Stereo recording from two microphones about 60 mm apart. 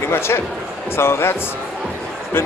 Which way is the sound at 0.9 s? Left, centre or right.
Left.